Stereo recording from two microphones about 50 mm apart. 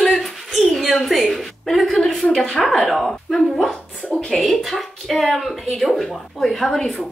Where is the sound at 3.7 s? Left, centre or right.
Left.